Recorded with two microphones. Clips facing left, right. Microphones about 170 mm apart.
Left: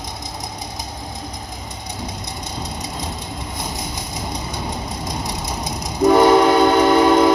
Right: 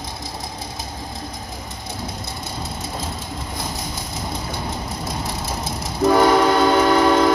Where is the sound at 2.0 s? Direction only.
15° left (ahead or behind).